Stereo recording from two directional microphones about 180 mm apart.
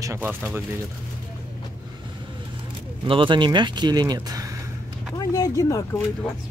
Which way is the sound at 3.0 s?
25° right (ahead or behind).